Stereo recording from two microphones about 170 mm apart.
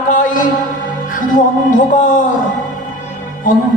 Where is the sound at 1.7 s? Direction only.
50° left (ahead or behind).